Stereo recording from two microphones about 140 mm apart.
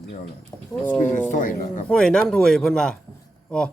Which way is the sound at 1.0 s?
65° left (ahead or behind).